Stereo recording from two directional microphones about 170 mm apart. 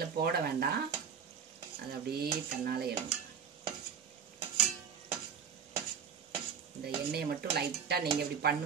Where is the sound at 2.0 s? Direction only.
65° right (ahead or behind).